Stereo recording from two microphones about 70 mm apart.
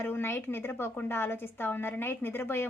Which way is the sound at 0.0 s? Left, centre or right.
Left.